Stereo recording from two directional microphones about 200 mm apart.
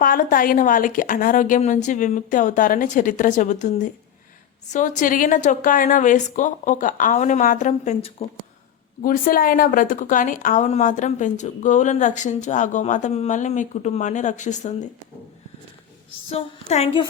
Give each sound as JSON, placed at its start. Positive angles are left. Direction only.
{"t": 0.0, "sound": "a woman's voice", "side_deg": 45}
{"t": 9.0, "sound": "a woman's voice", "side_deg": 45}
{"t": 16.3, "sound": "a woman's voice", "side_deg": 30}